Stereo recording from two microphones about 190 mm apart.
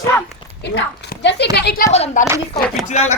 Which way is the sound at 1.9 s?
35° left (ahead or behind).